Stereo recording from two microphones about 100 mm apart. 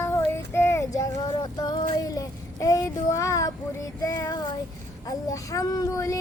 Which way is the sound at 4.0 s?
40° left (ahead or behind).